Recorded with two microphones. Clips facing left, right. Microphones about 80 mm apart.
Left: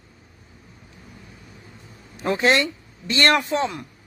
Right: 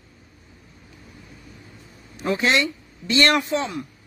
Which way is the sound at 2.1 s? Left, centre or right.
Left.